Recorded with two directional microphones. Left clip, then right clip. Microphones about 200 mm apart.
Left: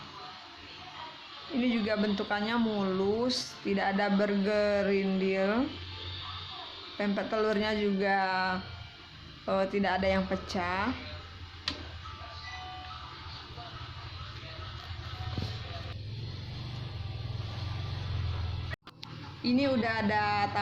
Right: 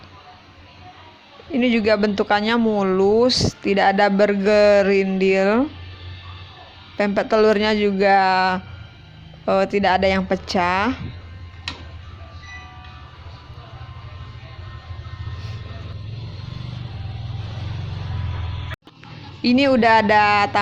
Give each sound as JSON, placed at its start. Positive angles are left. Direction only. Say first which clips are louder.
{"t": 1.5, "sound": "speech", "louder": "right 13 dB", "side_deg": -40}
{"t": 6.9, "sound": "a woman's voice", "louder": "right 14 dB", "side_deg": -40}
{"t": 19.4, "sound": "speech", "louder": "right 13 dB", "side_deg": -45}